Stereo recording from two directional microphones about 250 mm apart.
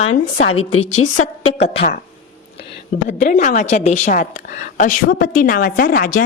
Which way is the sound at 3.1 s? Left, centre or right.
Left.